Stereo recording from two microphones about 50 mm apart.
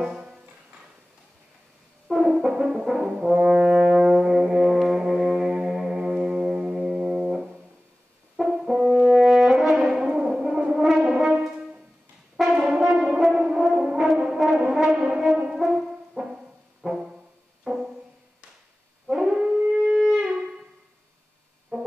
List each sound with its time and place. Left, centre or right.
0.0 s music: centre
2.0 s brass instrument: centre
3.8 s brass instrument: right
4.2 s brass instrument: centre
4.8 s music: centre
8.4 s french horn: centre
9.8 s brass instrument: centre
12.4 s french horn: centre
14.1 s brass instrument: centre
15.0 s french horn: centre
16.8 s music: centre
19.0 s howl: centre
19.6 s shofar: centre
21.7 s music: centre